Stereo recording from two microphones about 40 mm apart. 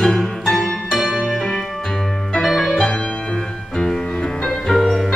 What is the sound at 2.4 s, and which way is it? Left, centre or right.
Music, centre.